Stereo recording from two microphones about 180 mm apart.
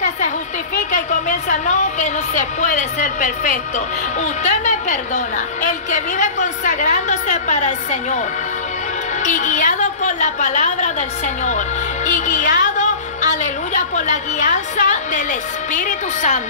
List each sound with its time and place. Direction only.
0.9 s a sound: 45° left (ahead or behind)
4.2 s a woman's voice: 40° left (ahead or behind)
9.2 s a woman's voice: 45° left (ahead or behind)
12.1 s a woman's voice: 45° left (ahead or behind)
12.7 s music: 40° left (ahead or behind)
13.9 s a woman's voice: 40° left (ahead or behind)